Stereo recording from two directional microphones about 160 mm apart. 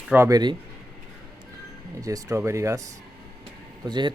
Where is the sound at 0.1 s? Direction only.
20° right (ahead or behind).